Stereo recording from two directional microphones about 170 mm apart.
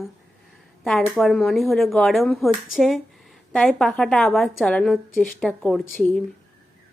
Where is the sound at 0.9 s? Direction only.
Centre (ahead or behind).